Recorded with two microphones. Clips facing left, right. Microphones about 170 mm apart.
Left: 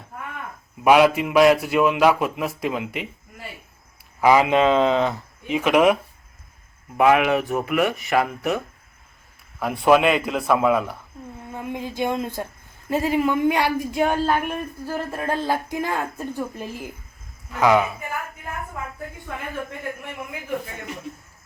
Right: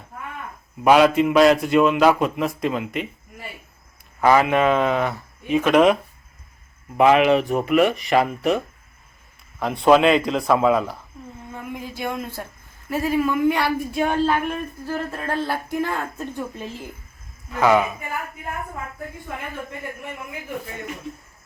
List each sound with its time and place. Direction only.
0.9 s speech: 10° left (ahead or behind)
4.2 s speech: 15° left (ahead or behind)
9.6 s speech: 5° left (ahead or behind)
11.5 s speech: 20° left (ahead or behind)